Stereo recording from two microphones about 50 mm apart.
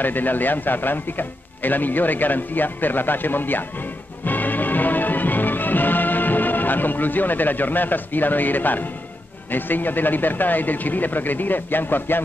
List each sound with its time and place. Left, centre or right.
0.0 s a man's voice: left
4.2 s music: left
9.5 s a man's voice: left